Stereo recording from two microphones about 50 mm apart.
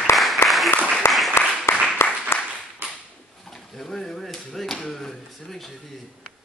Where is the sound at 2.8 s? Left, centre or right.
Right.